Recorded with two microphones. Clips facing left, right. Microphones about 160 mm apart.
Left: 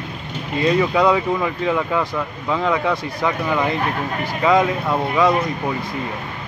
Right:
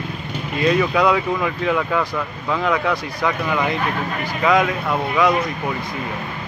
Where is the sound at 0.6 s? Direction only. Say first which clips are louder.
Left 1 dB; 20° left (ahead or behind).